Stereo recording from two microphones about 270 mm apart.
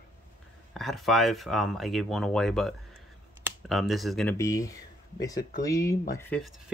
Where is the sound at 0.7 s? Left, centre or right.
Centre.